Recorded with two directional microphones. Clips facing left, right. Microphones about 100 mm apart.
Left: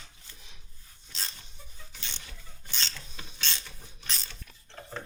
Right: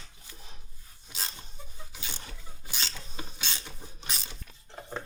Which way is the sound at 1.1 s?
20° right (ahead or behind).